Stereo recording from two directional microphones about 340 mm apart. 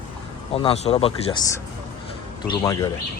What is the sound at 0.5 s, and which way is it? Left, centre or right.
Speech, centre.